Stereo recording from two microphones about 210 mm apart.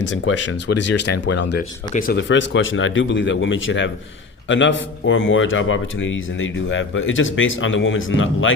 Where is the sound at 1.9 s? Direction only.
45° left (ahead or behind).